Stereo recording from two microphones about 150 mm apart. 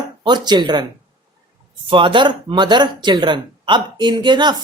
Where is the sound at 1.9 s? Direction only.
35° right (ahead or behind).